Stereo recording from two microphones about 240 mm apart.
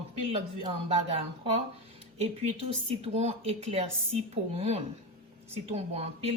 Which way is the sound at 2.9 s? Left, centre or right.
Right.